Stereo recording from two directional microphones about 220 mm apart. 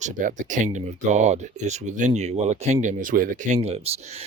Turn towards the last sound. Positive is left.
turn(degrees=-30)  # may be behind; listen again after turning